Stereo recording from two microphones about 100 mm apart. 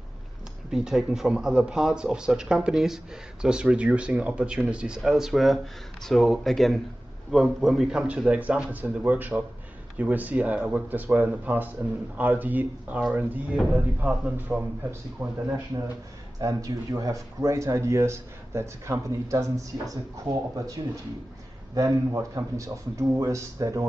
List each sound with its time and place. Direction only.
0.7 s speech: 5° right (ahead or behind)
8.3 s speech: 15° right (ahead or behind)
16.3 s speech: 35° right (ahead or behind)